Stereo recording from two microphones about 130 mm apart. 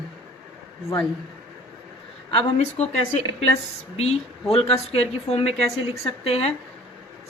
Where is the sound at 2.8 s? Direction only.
55° left (ahead or behind).